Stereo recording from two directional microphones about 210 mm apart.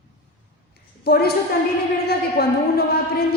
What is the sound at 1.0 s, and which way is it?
A woman's voice, 50° left (ahead or behind).